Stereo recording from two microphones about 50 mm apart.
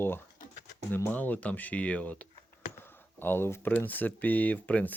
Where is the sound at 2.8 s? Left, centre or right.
Left.